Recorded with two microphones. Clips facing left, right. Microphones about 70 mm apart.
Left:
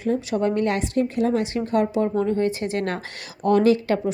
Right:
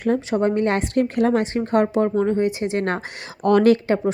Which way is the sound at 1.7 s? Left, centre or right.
Right.